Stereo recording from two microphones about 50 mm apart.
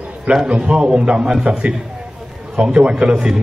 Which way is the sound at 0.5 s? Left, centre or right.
Centre.